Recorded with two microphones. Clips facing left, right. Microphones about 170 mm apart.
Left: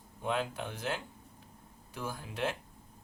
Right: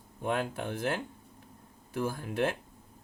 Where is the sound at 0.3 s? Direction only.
50° right (ahead or behind).